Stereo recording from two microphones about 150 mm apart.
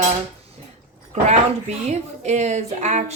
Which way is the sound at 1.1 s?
50° right (ahead or behind).